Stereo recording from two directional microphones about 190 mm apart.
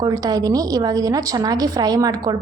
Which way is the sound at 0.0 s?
20° right (ahead or behind).